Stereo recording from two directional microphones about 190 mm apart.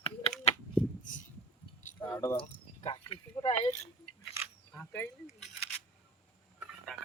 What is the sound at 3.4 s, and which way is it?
Speech, 35° left (ahead or behind).